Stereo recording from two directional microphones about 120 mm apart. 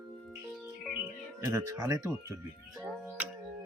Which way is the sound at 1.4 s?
25° right (ahead or behind).